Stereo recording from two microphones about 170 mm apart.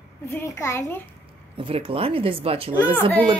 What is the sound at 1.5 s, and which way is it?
Speech, 30° right (ahead or behind).